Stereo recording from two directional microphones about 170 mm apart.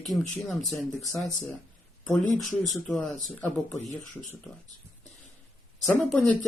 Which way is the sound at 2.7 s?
5° left (ahead or behind).